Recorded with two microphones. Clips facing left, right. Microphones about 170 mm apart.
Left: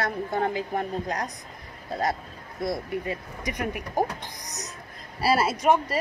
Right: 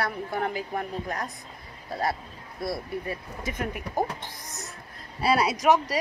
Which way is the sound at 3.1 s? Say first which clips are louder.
Left 2 dB; 15° left (ahead or behind).